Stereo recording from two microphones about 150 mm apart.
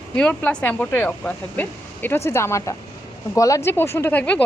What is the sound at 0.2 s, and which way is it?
A woman's voice, 10° left (ahead or behind).